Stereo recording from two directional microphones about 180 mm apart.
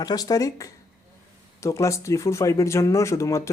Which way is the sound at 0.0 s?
20° left (ahead or behind).